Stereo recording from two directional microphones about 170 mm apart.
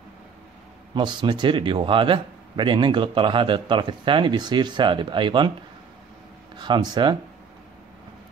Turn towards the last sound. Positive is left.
turn(degrees=-25)  # may be behind; listen again after turning